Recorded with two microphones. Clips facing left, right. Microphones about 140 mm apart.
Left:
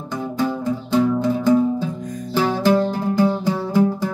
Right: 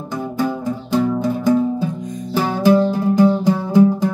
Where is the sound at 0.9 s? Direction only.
10° right (ahead or behind).